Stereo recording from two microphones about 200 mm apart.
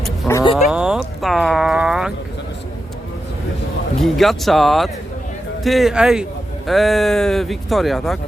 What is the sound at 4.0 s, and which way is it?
Speech, centre (ahead or behind).